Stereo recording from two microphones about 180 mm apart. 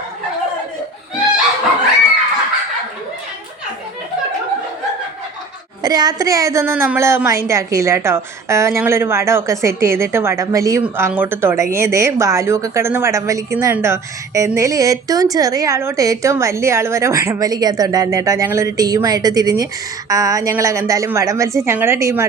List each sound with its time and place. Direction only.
5.8 s a woman's voice: 20° right (ahead or behind)